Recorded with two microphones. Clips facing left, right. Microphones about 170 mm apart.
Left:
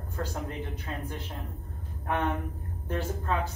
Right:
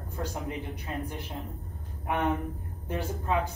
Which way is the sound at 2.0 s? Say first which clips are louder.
Right 1 dB; 15° right (ahead or behind).